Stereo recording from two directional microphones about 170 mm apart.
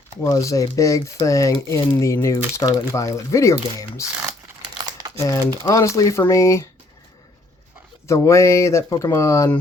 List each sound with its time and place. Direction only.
0.2 s speech: 20° left (ahead or behind)
4.9 s crumpling: 20° right (ahead or behind)
5.3 s speech: 20° left (ahead or behind)
8.0 s speech: 15° left (ahead or behind)